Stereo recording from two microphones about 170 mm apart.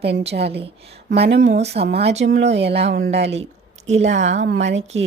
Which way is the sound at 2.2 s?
90° right.